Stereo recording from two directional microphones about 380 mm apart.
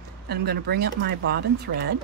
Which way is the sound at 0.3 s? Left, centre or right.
Right.